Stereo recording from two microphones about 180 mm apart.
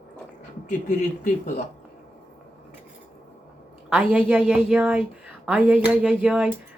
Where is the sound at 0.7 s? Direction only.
45° left (ahead or behind).